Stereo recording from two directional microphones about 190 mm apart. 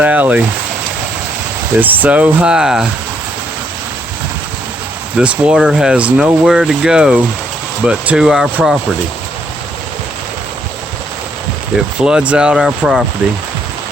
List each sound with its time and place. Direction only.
0.0 s speech: 10° right (ahead or behind)
1.8 s speech: 10° right (ahead or behind)
5.1 s speech: 5° right (ahead or behind)
11.9 s speech: 5° right (ahead or behind)